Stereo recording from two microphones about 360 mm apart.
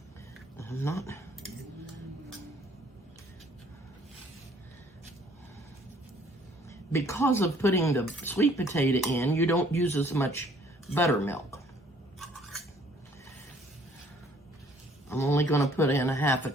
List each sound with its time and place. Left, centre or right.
0.5 s speech: centre
6.7 s speech: centre
12.2 s cutlery: centre
15.1 s speech: centre